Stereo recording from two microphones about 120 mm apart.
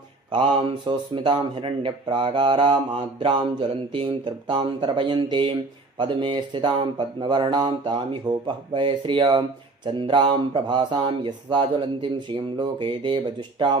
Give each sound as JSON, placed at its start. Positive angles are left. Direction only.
{"t": 0.3, "sound": "speech", "side_deg": -45}